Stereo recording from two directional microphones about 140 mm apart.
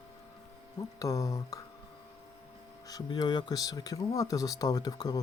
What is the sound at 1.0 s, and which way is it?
Speech, 25° left (ahead or behind).